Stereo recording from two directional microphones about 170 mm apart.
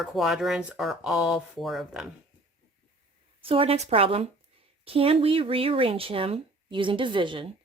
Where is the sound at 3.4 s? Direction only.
35° right (ahead or behind).